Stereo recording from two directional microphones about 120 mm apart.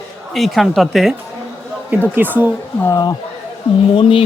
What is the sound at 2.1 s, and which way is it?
Speech, 15° right (ahead or behind).